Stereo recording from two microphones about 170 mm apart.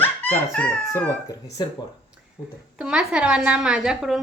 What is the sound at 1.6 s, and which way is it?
Speech, 25° left (ahead or behind).